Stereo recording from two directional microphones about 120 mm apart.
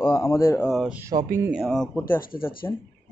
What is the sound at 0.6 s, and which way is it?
Speech, centre (ahead or behind).